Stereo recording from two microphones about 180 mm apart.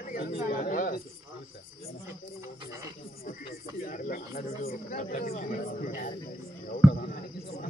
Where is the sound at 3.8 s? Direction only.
45° left (ahead or behind).